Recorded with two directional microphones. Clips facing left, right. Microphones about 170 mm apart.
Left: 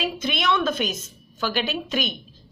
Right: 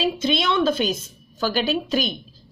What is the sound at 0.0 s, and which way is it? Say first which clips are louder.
A woman's voice: right 4 dB; 30° right (ahead or behind).